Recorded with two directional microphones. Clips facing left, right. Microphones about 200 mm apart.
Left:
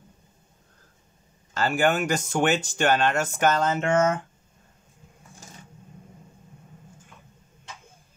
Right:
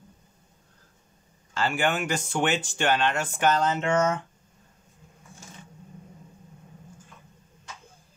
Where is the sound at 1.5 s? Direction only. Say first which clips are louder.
Left 3 dB; 40° left (ahead or behind).